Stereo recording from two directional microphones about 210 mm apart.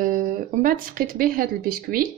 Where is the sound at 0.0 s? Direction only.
40° right (ahead or behind).